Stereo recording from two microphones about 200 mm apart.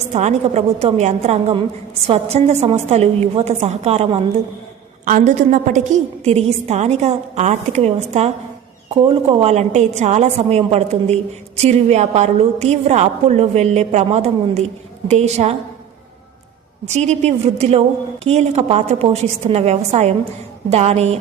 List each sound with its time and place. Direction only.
0.1 s a woman's voice: 35° right (ahead or behind)
16.9 s a woman's voice: 35° right (ahead or behind)